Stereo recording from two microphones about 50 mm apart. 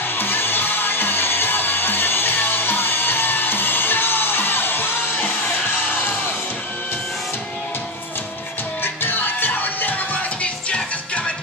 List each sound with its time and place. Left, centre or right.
0.2 s music: left
8.8 s music: left